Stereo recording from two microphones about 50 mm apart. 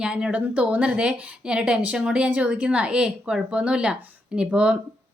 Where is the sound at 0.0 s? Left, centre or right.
Centre.